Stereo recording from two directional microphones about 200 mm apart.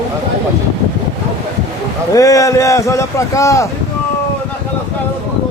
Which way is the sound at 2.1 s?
15° left (ahead or behind).